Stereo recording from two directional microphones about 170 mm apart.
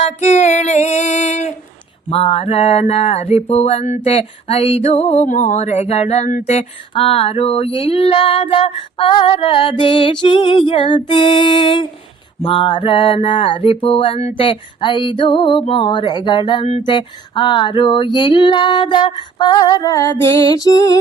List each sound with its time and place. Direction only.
0.0 s female singing: 45° left (ahead or behind)
2.0 s mantra: 35° left (ahead or behind)